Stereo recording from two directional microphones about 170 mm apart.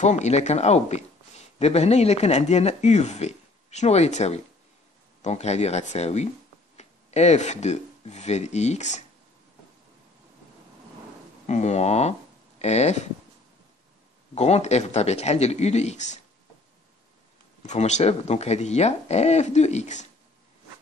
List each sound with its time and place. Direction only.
0.0 s speech: 40° left (ahead or behind)
11.4 s speech: 40° left (ahead or behind)
14.3 s speech: 40° left (ahead or behind)
17.6 s speech: 40° left (ahead or behind)